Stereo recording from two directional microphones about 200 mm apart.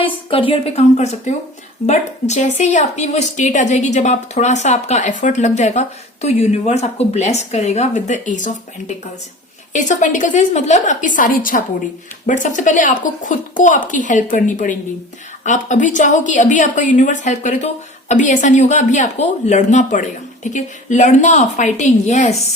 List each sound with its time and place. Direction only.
0.0 s a woman's voice: 25° left (ahead or behind)
9.7 s a woman's voice: 40° left (ahead or behind)